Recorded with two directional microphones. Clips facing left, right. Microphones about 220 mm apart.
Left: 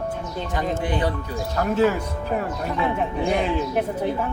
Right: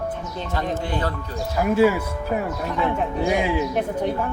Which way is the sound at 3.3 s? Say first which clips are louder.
Right 1 dB; 5° right (ahead or behind).